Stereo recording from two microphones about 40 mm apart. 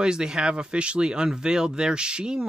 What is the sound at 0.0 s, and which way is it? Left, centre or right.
Speech, centre.